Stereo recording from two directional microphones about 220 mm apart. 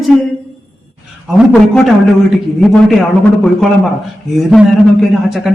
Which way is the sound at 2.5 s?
Centre (ahead or behind).